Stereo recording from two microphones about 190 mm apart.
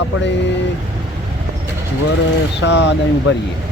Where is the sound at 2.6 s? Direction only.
70° left (ahead or behind).